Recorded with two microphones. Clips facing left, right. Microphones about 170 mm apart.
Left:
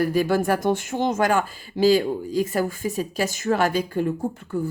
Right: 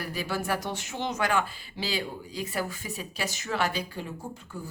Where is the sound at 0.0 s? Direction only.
50° left (ahead or behind).